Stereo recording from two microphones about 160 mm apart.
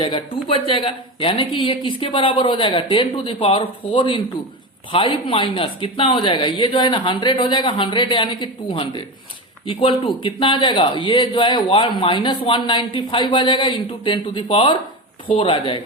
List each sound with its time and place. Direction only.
0.0 s speech: 35° left (ahead or behind)